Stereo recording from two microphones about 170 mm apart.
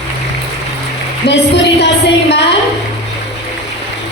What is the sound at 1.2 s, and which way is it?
Music, 35° left (ahead or behind).